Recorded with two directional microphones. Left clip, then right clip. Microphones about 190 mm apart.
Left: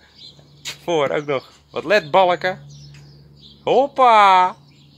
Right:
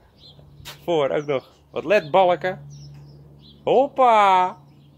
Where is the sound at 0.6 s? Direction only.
15° left (ahead or behind).